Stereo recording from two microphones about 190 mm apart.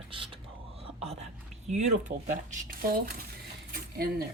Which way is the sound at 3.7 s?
55° right (ahead or behind).